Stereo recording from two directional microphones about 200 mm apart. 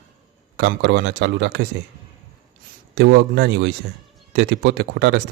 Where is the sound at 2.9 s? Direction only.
60° right (ahead or behind).